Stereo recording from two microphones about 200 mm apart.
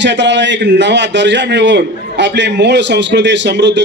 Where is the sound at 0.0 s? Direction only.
60° right (ahead or behind).